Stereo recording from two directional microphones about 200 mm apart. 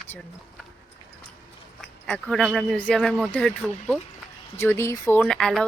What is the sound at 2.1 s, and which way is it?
Speech, 5° left (ahead or behind).